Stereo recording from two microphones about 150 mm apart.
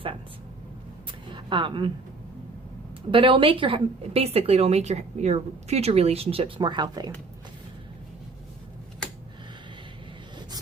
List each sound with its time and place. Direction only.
1.3 s speech: 35° right (ahead or behind)
3.1 s a woman's voice: 35° right (ahead or behind)